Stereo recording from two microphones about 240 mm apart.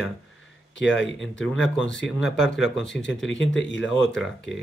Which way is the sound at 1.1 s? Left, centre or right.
Centre.